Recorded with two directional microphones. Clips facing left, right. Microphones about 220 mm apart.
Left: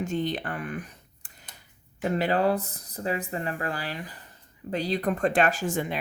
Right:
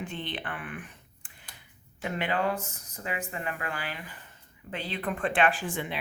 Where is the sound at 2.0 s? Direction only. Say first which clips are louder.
Left 5 dB; 40° left (ahead or behind).